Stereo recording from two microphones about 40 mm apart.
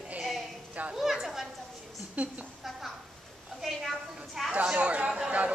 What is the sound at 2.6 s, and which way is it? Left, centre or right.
Speech, centre.